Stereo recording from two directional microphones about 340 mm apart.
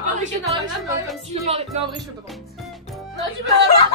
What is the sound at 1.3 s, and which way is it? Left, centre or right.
Speech, centre.